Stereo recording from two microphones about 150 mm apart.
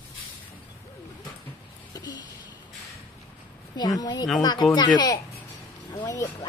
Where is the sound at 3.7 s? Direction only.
25° left (ahead or behind).